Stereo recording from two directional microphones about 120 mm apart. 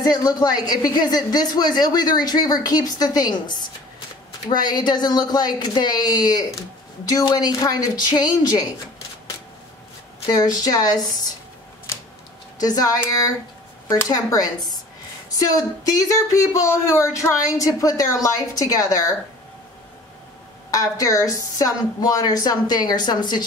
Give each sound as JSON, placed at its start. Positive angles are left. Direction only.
{"t": 0.0, "sound": "speech", "side_deg": 35}
{"t": 10.2, "sound": "speech", "side_deg": 35}
{"t": 12.5, "sound": "speech", "side_deg": 30}
{"t": 20.7, "sound": "speech", "side_deg": 30}